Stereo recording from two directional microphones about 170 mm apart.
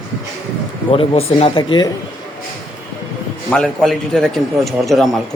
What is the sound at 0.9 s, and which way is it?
Speech, 35° left (ahead or behind).